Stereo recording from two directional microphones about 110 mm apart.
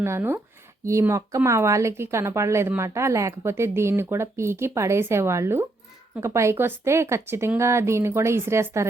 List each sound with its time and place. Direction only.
0.0 s a woman's voice: 25° right (ahead or behind)